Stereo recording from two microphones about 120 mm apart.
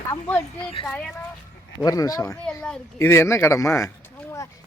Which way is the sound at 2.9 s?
25° left (ahead or behind).